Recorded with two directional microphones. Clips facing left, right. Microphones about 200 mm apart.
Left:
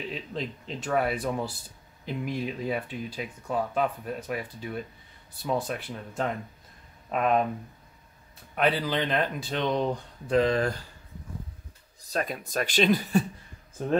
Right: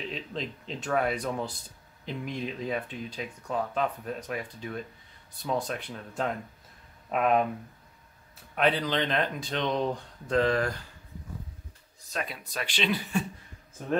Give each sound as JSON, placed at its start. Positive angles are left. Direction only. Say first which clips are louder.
{"t": 0.0, "sound": "speech", "louder": "left 1 dB", "side_deg": 5}
{"t": 8.5, "sound": "speech", "louder": "even", "side_deg": 5}
{"t": 10.3, "sound": "speech", "louder": "left 2 dB", "side_deg": 15}
{"t": 12.1, "sound": "speech", "louder": "left 5 dB", "side_deg": 45}